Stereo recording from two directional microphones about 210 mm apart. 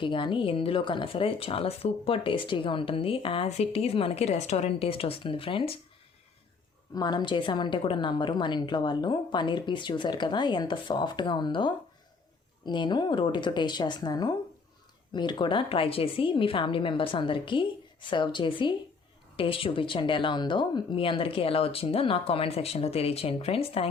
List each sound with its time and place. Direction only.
0.0 s speech: 25° left (ahead or behind)
6.9 s speech: 20° left (ahead or behind)